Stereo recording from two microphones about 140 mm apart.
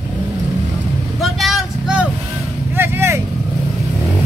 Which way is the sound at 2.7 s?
15° right (ahead or behind).